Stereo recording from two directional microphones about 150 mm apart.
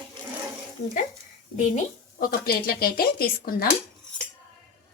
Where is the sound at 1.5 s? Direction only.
50° left (ahead or behind).